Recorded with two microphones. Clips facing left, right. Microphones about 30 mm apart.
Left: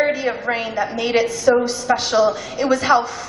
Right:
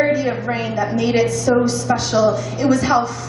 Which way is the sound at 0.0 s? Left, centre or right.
Centre.